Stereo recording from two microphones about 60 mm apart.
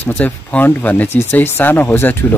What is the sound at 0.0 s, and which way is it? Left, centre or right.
Speech, left.